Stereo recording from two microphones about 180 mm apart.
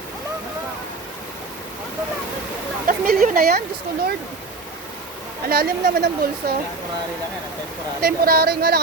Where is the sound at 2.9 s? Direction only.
50° right (ahead or behind).